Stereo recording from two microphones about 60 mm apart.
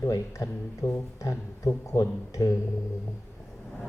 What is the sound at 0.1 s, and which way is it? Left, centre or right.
Speech, left.